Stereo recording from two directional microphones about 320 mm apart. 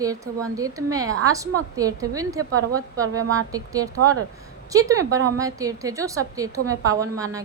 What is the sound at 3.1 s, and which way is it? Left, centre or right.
Speech, right.